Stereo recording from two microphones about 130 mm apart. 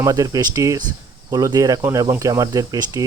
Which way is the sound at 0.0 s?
25° right (ahead or behind).